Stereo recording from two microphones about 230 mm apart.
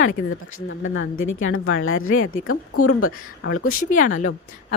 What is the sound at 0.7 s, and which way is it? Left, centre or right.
A woman's voice, left.